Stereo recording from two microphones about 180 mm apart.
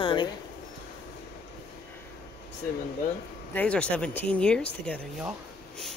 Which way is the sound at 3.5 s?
5° left (ahead or behind).